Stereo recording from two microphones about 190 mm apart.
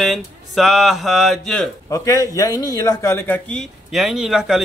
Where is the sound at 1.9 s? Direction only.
15° left (ahead or behind).